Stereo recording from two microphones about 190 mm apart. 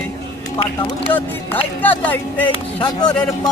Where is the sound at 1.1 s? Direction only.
10° left (ahead or behind).